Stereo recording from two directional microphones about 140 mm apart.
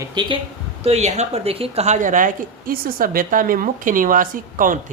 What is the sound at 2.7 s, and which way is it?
A woman's voice, 90° right.